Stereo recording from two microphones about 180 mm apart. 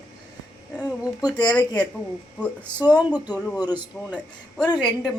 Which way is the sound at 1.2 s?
20° left (ahead or behind).